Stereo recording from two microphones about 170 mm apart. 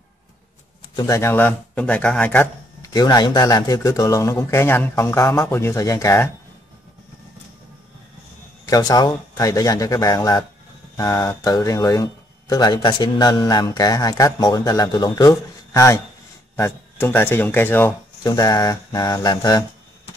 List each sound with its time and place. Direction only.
0.9 s a man's voice: 20° left (ahead or behind)
2.9 s speech: 25° left (ahead or behind)
8.6 s speech: 20° left (ahead or behind)